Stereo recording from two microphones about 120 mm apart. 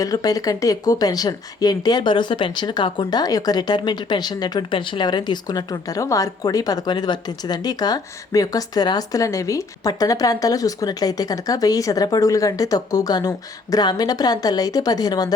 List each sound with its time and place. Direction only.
0.0 s speech: 30° left (ahead or behind)